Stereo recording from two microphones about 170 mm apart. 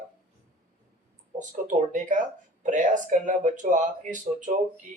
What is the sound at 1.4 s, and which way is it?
Speech, 45° right (ahead or behind).